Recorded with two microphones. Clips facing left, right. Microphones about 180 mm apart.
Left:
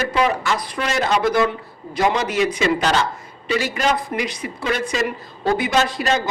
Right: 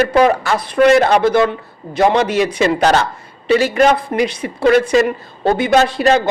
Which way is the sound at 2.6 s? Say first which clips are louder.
Right 5 dB; 45° right (ahead or behind).